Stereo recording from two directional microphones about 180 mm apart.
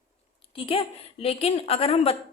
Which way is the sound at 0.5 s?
30° left (ahead or behind).